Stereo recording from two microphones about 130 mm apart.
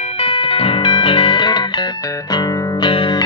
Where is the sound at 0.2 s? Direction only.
45° left (ahead or behind).